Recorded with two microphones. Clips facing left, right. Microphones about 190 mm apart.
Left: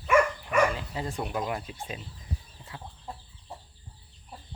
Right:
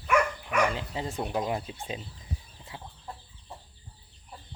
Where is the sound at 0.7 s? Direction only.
20° right (ahead or behind).